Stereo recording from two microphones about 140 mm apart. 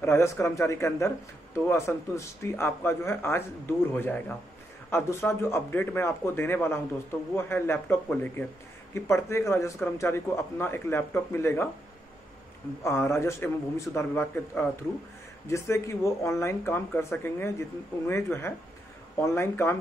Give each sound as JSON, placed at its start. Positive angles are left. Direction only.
{"t": 0.0, "sound": "speech", "side_deg": 20}
{"t": 12.8, "sound": "speech", "side_deg": 20}